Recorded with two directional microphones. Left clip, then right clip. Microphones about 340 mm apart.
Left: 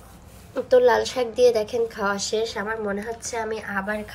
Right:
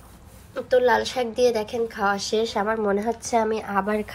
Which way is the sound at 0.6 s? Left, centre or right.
Centre.